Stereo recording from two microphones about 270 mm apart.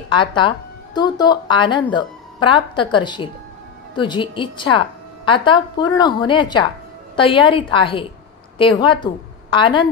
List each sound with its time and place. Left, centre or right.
0.1 s a woman's voice: centre